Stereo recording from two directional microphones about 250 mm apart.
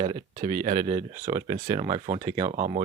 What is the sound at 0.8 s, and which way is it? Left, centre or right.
Speech, centre.